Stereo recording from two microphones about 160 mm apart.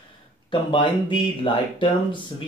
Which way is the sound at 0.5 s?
35° left (ahead or behind).